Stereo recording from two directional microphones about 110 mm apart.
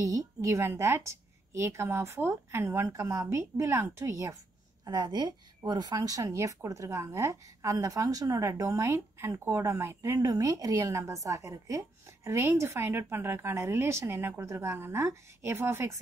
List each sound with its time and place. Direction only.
0.0 s a woman's voice: 30° right (ahead or behind)
4.8 s a woman's voice: 40° right (ahead or behind)